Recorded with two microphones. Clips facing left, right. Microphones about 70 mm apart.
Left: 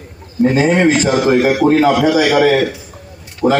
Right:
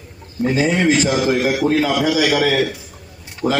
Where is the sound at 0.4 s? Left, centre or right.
Left.